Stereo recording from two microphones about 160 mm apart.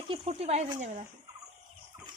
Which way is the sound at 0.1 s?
40° right (ahead or behind).